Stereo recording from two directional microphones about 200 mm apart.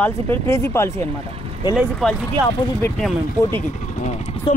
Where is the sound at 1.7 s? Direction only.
Centre (ahead or behind).